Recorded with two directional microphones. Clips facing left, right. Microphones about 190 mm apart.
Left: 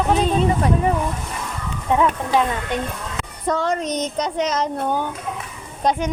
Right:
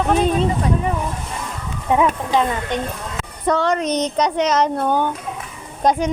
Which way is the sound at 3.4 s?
70° right (ahead or behind).